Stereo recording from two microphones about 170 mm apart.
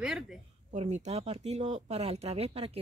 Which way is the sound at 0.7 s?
40° right (ahead or behind).